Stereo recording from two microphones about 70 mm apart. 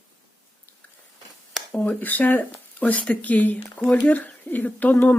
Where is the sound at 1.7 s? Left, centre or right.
Left.